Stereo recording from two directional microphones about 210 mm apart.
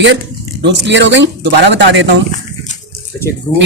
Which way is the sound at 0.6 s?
55° right (ahead or behind).